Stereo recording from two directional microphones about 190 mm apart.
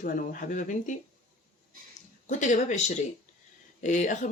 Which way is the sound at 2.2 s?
40° left (ahead or behind).